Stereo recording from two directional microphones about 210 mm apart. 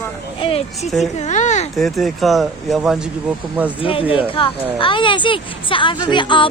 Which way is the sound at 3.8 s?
25° left (ahead or behind).